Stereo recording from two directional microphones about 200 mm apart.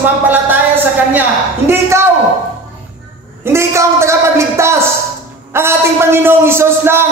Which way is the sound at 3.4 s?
15° right (ahead or behind).